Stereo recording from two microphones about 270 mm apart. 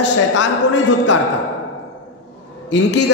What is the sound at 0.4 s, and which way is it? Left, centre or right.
Speech, left.